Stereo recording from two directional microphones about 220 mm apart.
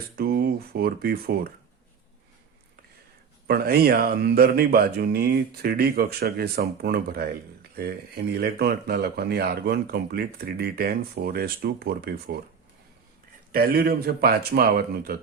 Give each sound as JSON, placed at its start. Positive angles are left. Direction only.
{"t": 0.2, "sound": "speech", "side_deg": -45}
{"t": 3.4, "sound": "speech", "side_deg": -45}
{"t": 13.5, "sound": "speech", "side_deg": -45}